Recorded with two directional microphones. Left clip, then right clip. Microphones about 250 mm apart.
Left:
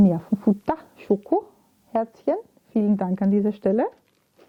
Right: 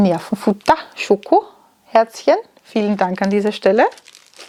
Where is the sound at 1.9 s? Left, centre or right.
Centre.